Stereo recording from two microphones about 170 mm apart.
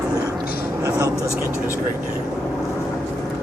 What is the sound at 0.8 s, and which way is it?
Speech, 20° right (ahead or behind).